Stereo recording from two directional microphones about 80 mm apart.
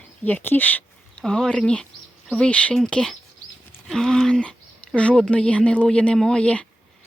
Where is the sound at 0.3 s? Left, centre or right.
Left.